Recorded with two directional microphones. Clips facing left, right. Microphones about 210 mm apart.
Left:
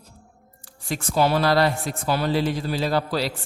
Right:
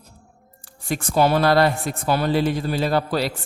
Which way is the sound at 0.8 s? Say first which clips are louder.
Right 2 dB; 55° right (ahead or behind).